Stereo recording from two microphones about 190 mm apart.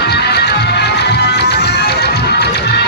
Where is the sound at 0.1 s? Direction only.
60° left (ahead or behind).